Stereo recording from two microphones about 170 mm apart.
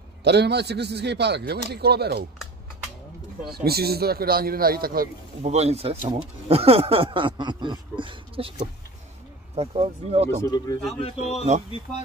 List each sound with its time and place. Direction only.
0.2 s a man's voice: 80° right
3.6 s a man's voice: 65° right (ahead or behind)
5.4 s speech: 40° right (ahead or behind)
10.4 s speech: 20° left (ahead or behind)
11.0 s a man's voice: 35° left (ahead or behind)